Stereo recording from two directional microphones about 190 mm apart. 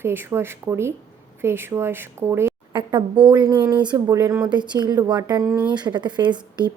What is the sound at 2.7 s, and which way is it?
A woman's voice, 25° right (ahead or behind).